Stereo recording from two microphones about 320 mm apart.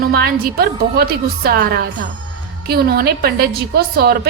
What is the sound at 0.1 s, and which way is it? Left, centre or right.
A woman's voice, right.